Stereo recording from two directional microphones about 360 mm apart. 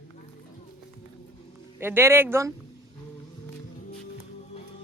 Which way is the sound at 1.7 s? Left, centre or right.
Centre.